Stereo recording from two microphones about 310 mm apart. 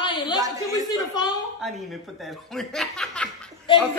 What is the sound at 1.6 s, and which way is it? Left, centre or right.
Speech, centre.